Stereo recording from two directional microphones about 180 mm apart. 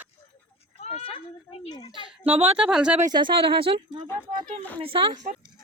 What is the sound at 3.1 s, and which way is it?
Speech, 25° right (ahead or behind).